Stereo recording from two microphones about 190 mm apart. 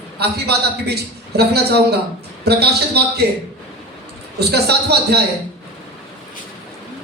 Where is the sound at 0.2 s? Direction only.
60° right (ahead or behind).